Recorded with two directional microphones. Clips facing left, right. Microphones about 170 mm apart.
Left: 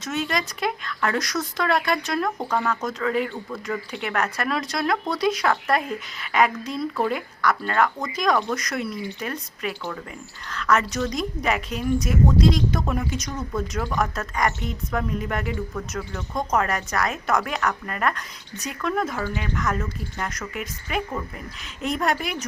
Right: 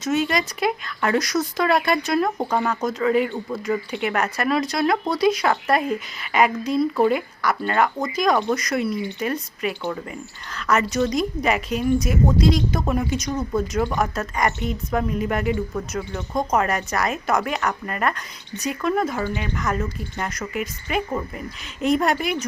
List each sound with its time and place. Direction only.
0.0 s speech: 5° right (ahead or behind)
2.4 s speech: 15° right (ahead or behind)
2.8 s speech: 5° right (ahead or behind)
13.3 s speech: 15° right (ahead or behind)
14.0 s speech: 5° right (ahead or behind)